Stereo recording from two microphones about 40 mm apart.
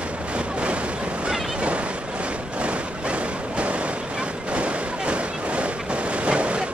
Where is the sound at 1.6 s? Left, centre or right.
Right.